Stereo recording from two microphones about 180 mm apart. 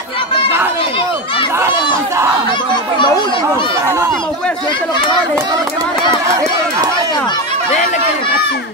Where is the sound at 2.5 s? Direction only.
25° left (ahead or behind).